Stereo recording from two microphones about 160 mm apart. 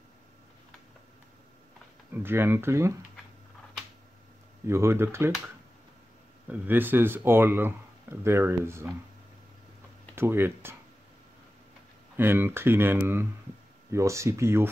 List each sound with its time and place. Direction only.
2.1 s speech: 15° right (ahead or behind)
4.6 s speech: 15° right (ahead or behind)
6.4 s speech: 10° right (ahead or behind)
10.1 s speech: 15° right (ahead or behind)
12.2 s speech: 15° right (ahead or behind)